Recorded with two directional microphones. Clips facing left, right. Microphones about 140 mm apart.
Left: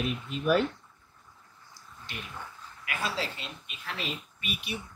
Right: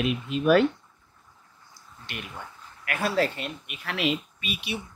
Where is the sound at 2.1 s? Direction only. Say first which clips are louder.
Right 4 dB; 70° right (ahead or behind).